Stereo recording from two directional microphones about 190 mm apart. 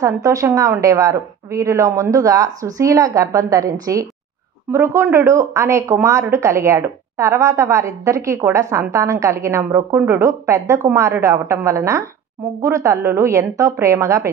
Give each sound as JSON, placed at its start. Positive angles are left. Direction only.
{"t": 0.0, "sound": "speech", "side_deg": -15}